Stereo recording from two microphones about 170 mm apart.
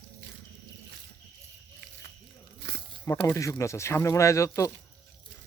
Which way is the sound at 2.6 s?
80° right.